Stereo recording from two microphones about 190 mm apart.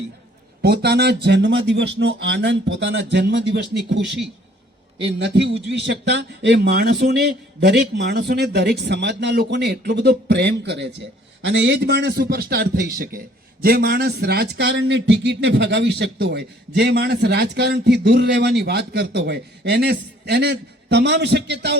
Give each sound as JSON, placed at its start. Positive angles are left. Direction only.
{"t": 0.6, "sound": "a man's voice", "side_deg": -60}